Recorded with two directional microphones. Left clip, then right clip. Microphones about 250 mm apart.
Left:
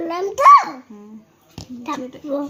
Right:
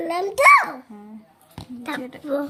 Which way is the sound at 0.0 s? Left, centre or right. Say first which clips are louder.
Left 3 dB; right.